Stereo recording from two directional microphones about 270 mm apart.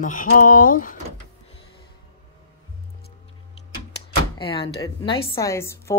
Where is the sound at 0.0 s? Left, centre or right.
Left.